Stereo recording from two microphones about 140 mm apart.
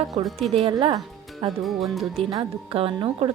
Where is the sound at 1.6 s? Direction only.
Centre (ahead or behind).